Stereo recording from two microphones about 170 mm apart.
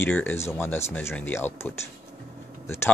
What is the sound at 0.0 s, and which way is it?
Speech, 10° left (ahead or behind).